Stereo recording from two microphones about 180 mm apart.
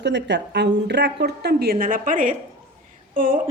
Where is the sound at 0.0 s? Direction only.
75° right (ahead or behind).